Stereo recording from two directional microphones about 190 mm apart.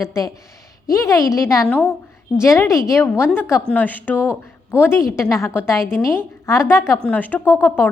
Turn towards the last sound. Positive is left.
turn(degrees=10)  # may be behind; listen again after turning